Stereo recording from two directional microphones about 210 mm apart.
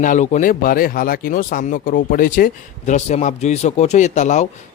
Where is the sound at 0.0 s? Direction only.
35° left (ahead or behind).